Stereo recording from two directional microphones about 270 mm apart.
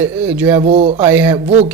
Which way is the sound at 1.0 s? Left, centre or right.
Centre.